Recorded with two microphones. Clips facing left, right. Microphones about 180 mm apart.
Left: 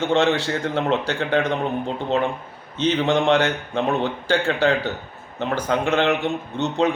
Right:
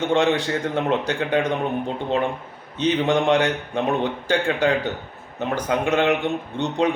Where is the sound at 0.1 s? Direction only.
15° right (ahead or behind).